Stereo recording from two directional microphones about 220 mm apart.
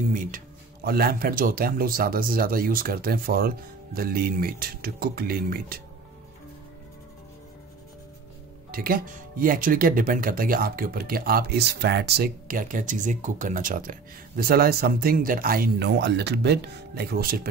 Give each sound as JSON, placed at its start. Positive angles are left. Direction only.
{"t": 0.1, "sound": "speech", "side_deg": -40}
{"t": 8.7, "sound": "speech", "side_deg": -40}